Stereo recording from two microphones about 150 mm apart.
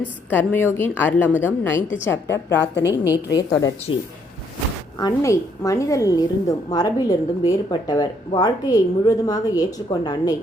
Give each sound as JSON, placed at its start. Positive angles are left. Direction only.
{"t": 0.3, "sound": "a woman's voice", "side_deg": 10}
{"t": 4.9, "sound": "a woman's voice", "side_deg": 25}